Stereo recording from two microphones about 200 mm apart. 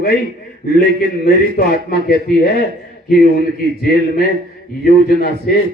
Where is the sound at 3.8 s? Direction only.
50° left (ahead or behind).